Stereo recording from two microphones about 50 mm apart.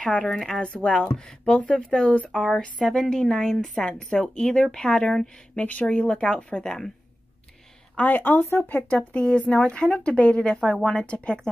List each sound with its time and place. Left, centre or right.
0.0 s speech: centre
0.7 s speech: centre
1.1 s a woman's voice: centre
5.6 s speech: left
7.9 s speech: left
8.8 s speech: left